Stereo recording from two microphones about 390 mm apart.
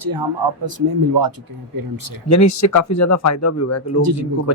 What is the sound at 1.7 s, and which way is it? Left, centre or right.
Speech, right.